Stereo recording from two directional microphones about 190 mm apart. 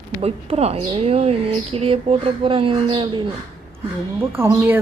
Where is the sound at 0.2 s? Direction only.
30° right (ahead or behind).